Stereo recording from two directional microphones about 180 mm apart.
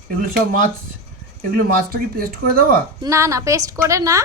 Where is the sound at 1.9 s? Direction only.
55° right (ahead or behind).